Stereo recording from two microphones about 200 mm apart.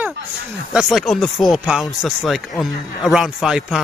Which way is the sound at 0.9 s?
Centre (ahead or behind).